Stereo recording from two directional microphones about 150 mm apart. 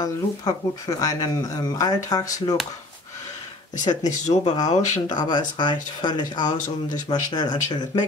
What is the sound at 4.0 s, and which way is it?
Speech, 50° left (ahead or behind).